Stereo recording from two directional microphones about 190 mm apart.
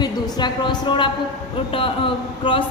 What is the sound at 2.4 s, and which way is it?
Speech, 25° left (ahead or behind).